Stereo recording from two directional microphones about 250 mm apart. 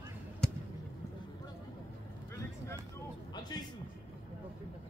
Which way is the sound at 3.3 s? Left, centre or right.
Centre.